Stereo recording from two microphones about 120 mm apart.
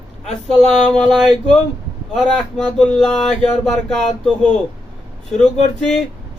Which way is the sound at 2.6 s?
5° left (ahead or behind).